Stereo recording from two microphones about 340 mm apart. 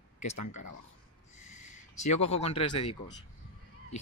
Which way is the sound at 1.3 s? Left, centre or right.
Centre.